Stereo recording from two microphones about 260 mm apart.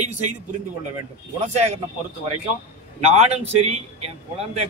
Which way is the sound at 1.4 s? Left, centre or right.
Right.